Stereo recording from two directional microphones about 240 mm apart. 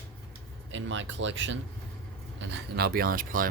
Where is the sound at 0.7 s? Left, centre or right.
Right.